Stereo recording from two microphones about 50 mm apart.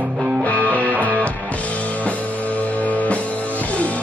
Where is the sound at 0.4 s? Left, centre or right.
Left.